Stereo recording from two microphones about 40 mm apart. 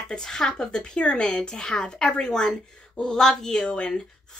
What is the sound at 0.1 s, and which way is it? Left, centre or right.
Speech, centre.